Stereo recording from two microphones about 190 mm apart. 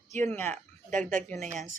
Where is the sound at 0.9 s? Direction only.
40° right (ahead or behind).